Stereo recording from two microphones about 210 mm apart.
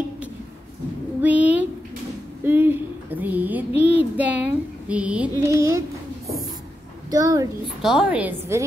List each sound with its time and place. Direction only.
1.2 s a sound: 5° right (ahead or behind)
2.4 s speech: 10° right (ahead or behind)
7.1 s a child's voice: 15° right (ahead or behind)
7.8 s a woman's voice: 5° right (ahead or behind)